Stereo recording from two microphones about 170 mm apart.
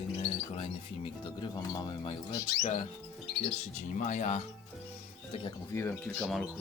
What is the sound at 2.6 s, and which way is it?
Speech, 40° left (ahead or behind).